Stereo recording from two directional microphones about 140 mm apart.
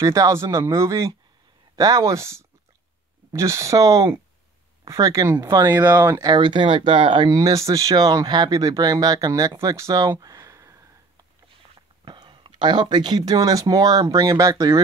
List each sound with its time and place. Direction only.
0.0 s speech: 25° right (ahead or behind)
12.0 s speech: 35° right (ahead or behind)